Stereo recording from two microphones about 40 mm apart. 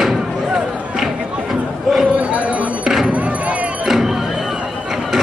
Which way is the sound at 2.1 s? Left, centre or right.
Right.